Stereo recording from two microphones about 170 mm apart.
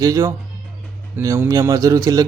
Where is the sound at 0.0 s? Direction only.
20° right (ahead or behind).